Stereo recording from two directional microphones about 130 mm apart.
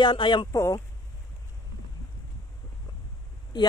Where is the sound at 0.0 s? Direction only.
35° left (ahead or behind).